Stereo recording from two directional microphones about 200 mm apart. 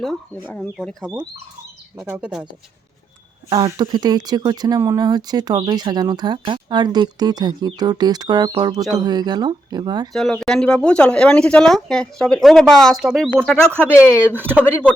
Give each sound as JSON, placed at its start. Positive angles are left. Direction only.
{"t": 0.0, "sound": "speech", "side_deg": 5}
{"t": 0.8, "sound": "speech", "side_deg": 0}
{"t": 3.5, "sound": "speech", "side_deg": -20}
{"t": 10.1, "sound": "speech", "side_deg": 0}
{"t": 13.7, "sound": "speech", "side_deg": -10}
{"t": 13.9, "sound": "speech", "side_deg": 15}
{"t": 14.3, "sound": "speech", "side_deg": -10}